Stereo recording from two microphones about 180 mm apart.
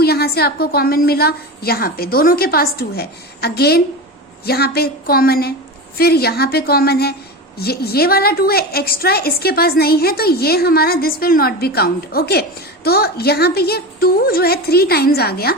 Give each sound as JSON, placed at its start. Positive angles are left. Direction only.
{"t": 0.0, "sound": "a woman's voice", "side_deg": 60}